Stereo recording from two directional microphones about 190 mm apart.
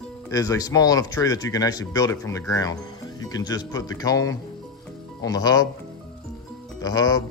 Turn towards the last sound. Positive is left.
turn(degrees=20)  # may be behind; listen again after turning